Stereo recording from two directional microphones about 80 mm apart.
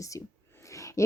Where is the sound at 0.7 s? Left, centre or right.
Left.